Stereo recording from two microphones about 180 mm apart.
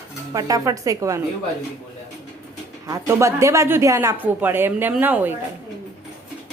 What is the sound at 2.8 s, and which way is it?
Speech, 15° right (ahead or behind).